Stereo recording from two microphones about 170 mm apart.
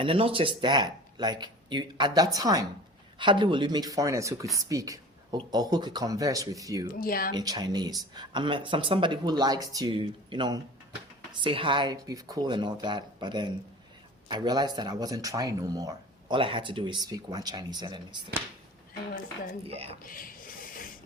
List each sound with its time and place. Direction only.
0.0 s speech: 30° right (ahead or behind)
7.0 s speech: 60° left (ahead or behind)
7.3 s speech: 25° right (ahead or behind)
19.6 s a woman's voice: 35° right (ahead or behind)
20.1 s speech: 55° left (ahead or behind)